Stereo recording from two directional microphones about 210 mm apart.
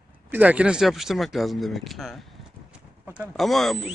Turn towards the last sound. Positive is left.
turn(degrees=0)  # may be behind; listen again after turning